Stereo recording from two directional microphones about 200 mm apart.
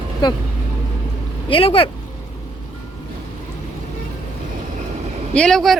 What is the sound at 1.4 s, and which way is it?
Speech, 25° left (ahead or behind).